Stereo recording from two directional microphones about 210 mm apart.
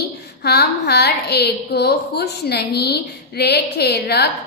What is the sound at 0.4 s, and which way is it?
A woman's voice, 50° left (ahead or behind).